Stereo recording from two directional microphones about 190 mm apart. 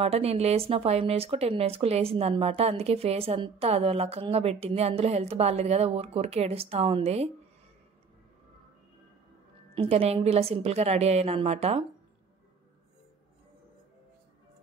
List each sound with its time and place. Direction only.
0.0 s speech: 30° right (ahead or behind)
9.8 s speech: 30° right (ahead or behind)